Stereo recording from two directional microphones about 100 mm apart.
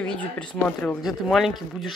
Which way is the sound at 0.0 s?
10° left (ahead or behind).